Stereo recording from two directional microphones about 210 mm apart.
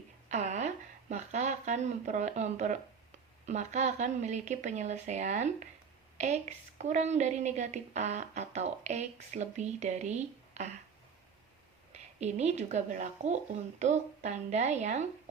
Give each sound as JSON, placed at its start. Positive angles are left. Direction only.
{"t": 0.3, "sound": "a sound", "side_deg": -35}
{"t": 3.4, "sound": "a woman's voice", "side_deg": -35}
{"t": 11.9, "sound": "a woman's voice", "side_deg": -30}